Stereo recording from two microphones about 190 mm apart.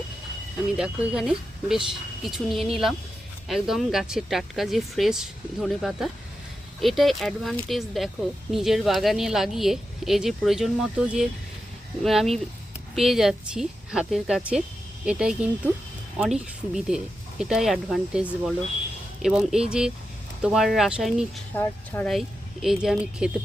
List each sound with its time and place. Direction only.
0.8 s speech: 5° right (ahead or behind)
21.5 s speech: 10° left (ahead or behind)